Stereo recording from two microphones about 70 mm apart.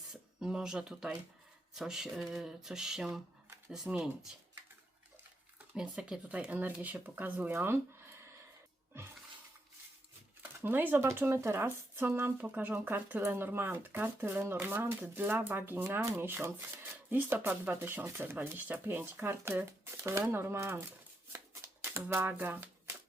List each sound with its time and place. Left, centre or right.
0.1 s speech: centre
5.7 s speech: centre; by 9.1 s right
10.6 s speech: right
21.5 s shuffling cards: right
22.1 s speech: right